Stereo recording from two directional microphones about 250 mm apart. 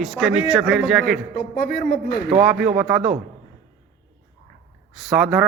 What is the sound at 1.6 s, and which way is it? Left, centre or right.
Speech, left.